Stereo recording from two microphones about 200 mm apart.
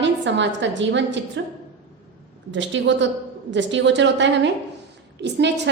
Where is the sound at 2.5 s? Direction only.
65° right (ahead or behind).